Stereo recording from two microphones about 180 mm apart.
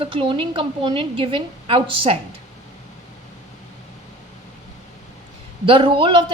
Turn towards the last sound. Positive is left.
turn(degrees=-30)  # may be behind; listen again after turning